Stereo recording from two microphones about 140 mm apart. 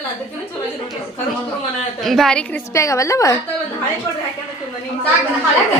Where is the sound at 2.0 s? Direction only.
Centre (ahead or behind).